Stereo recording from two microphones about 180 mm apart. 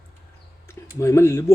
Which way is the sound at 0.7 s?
15° left (ahead or behind).